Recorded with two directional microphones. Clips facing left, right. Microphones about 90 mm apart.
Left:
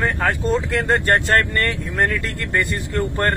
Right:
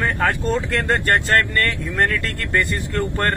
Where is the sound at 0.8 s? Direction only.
20° left (ahead or behind).